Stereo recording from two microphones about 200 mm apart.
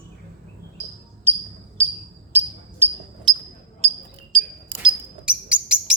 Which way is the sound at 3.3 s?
20° right (ahead or behind).